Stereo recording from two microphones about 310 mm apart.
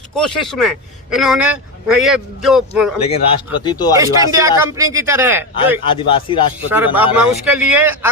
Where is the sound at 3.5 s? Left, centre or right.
Centre.